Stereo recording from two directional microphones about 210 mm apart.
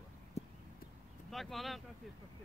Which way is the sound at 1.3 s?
Centre (ahead or behind).